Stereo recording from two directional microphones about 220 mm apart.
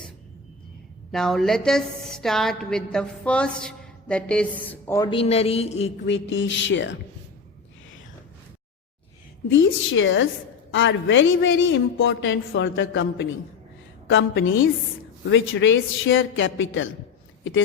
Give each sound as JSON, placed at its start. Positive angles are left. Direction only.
{"t": 1.1, "sound": "a woman's voice", "side_deg": 0}
{"t": 6.1, "sound": "a woman's voice", "side_deg": 55}
{"t": 9.5, "sound": "a woman's voice", "side_deg": 60}